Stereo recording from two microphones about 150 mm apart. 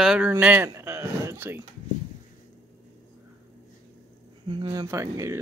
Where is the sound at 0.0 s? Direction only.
5° right (ahead or behind).